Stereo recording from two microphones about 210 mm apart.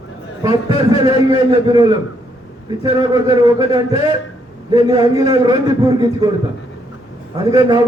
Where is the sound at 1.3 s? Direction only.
20° right (ahead or behind).